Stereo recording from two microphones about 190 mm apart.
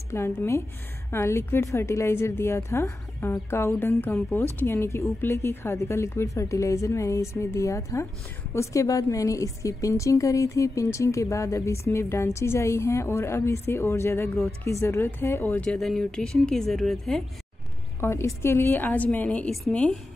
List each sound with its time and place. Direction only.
0.1 s a woman's voice: 15° left (ahead or behind)
14.3 s speech: 5° left (ahead or behind)
14.7 s speech: 15° left (ahead or behind)
18.0 s a woman's voice: 15° left (ahead or behind)